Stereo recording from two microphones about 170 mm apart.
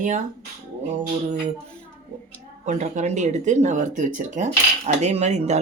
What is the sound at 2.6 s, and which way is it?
Speech, 45° right (ahead or behind).